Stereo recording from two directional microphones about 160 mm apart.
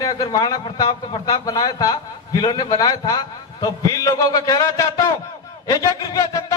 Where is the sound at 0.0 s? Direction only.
25° left (ahead or behind).